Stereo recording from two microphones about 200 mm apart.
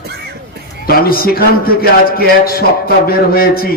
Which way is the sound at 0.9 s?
50° left (ahead or behind).